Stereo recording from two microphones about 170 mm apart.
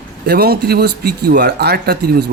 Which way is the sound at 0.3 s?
65° right (ahead or behind).